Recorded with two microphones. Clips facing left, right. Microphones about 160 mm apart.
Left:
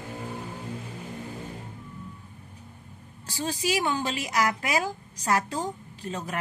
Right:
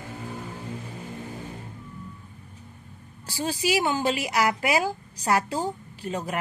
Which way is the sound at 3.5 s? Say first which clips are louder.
Right 2 dB; 10° right (ahead or behind).